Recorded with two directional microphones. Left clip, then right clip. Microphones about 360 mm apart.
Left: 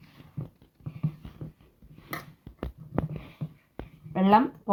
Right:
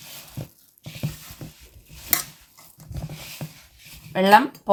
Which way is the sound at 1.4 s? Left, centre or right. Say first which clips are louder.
Right 4 dB; centre.